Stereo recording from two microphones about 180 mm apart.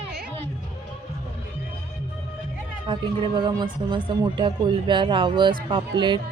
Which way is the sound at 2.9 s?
25° right (ahead or behind).